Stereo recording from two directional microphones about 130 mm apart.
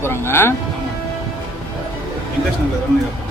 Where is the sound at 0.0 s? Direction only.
20° left (ahead or behind).